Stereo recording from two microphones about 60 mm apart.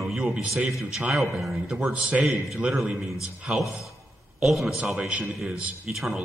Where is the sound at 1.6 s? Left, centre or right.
Centre.